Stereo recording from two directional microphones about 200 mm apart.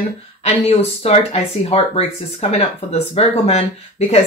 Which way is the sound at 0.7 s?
30° left (ahead or behind).